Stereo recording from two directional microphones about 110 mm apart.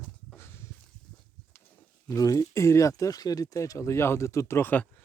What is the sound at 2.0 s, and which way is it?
Speech, 35° left (ahead or behind).